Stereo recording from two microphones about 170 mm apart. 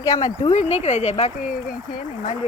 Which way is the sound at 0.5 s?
40° left (ahead or behind).